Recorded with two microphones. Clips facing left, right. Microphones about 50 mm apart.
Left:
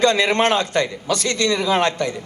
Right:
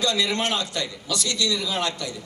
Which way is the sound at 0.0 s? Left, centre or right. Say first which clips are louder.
Left 8 dB; left.